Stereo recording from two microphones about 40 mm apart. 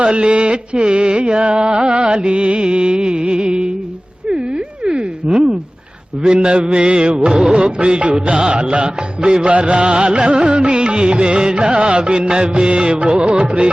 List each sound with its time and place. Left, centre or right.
0.0 s music: right
4.3 s a sound: right
6.2 s music: right
7.6 s music: right